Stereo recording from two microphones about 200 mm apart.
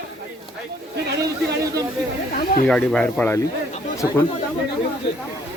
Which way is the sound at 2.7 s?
5° left (ahead or behind).